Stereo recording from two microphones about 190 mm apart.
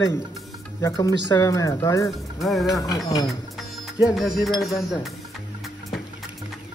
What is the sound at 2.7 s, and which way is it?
Speech, 20° left (ahead or behind).